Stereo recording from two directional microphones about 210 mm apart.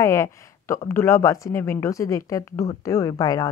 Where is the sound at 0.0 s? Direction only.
15° left (ahead or behind).